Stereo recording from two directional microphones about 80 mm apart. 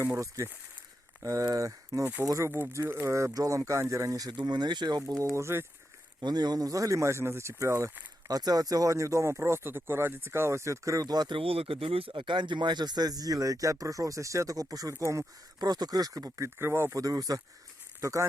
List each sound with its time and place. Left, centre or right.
1.2 s speech: right
2.7 s speech: right
4.3 s speech: right
5.1 s speech: right
6.1 s speech: right
8.3 s speech: right
12.1 s speech: right
15.6 s speech: right
16.6 s speech: right
17.0 s speech: right
18.0 s speech: right